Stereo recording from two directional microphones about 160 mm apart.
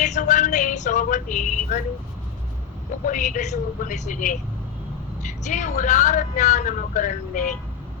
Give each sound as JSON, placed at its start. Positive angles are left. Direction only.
{"t": 0.0, "sound": "speech", "side_deg": 50}
{"t": 3.1, "sound": "a man's voice", "side_deg": 55}